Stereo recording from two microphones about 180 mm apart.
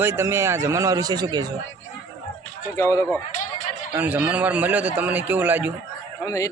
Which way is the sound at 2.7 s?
15° left (ahead or behind).